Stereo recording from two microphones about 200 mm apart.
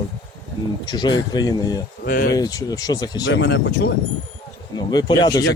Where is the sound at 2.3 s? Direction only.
20° left (ahead or behind).